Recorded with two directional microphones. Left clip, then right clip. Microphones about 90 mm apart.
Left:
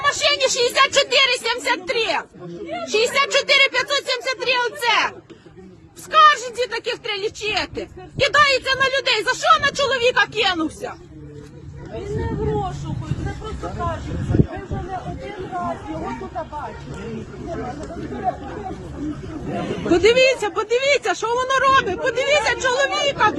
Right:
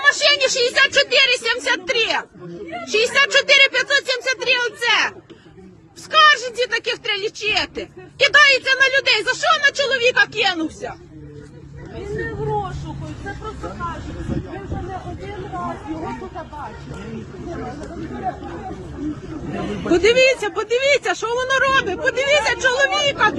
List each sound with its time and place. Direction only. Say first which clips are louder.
0.0 s a sound: right 3 dB; 15° left (ahead or behind)
0.3 s a woman's voice: right 1 dB; 35° left (ahead or behind)
12.1 s a sound: right 1 dB; centre (ahead or behind)
13.8 s vehicle: left 1 dB; 35° left (ahead or behind)
15.4 s speech: left 2 dB; 30° left (ahead or behind)
17.1 s speech: left 2 dB; 40° left (ahead or behind)
19.9 s a woman's voice: right 1 dB; 30° left (ahead or behind)